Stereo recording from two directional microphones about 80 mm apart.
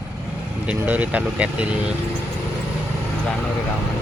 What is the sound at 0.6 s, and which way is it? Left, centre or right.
Speech, centre.